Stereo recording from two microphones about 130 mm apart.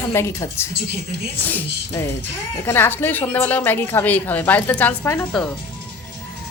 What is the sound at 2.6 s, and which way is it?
A woman's voice, 15° left (ahead or behind).